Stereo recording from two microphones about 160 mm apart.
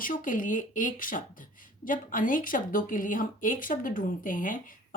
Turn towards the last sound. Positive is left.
turn(degrees=55)  # may be behind; listen again after turning